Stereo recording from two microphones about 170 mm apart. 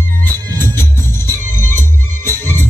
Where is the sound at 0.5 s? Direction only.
15° left (ahead or behind).